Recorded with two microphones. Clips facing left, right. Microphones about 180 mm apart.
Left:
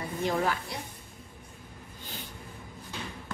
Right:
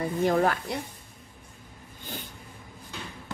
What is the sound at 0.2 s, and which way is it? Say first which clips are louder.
Speech: right 5 dB; 50° right (ahead or behind).